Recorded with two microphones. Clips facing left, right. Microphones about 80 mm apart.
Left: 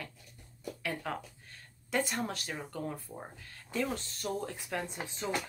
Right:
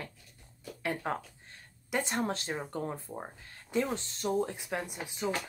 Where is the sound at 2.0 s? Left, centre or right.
Right.